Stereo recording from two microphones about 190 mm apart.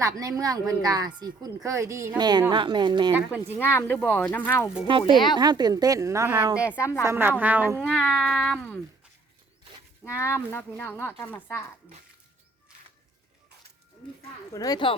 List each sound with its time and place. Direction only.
0.0 s a woman's voice: 20° right (ahead or behind)
3.1 s speech: 10° right (ahead or behind)
3.6 s speech: 10° left (ahead or behind)
4.9 s a woman's voice: 25° right (ahead or behind)
5.1 s speech: 25° left (ahead or behind)
5.4 s a woman's voice: 20° right (ahead or behind)
7.9 s speech: 5° left (ahead or behind)
10.0 s speech: 15° left (ahead or behind)
14.5 s speech: 20° left (ahead or behind)